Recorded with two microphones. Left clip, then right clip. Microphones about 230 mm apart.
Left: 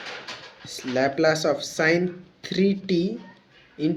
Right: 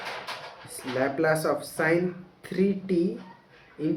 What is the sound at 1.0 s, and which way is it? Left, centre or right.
Speech, left.